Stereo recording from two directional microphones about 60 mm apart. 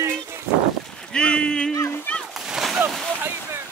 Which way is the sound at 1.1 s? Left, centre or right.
Centre.